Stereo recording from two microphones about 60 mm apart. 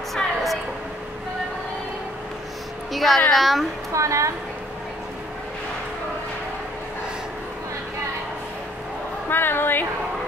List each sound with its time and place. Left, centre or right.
0.1 s a sound: centre
2.9 s speech: centre
3.9 s speech: right
9.3 s speech: left